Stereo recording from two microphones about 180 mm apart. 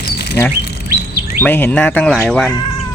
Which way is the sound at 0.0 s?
65° left (ahead or behind).